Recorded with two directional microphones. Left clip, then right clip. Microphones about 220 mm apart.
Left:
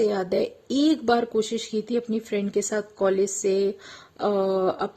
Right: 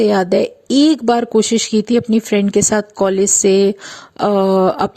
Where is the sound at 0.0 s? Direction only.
35° right (ahead or behind).